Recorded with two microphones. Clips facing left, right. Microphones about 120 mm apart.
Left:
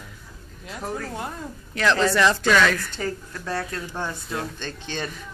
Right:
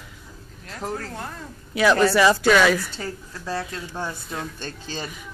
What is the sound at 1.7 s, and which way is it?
A woman's voice, 10° right (ahead or behind).